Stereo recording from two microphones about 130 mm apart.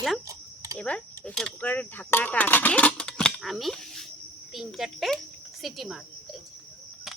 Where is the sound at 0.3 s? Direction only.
25° right (ahead or behind).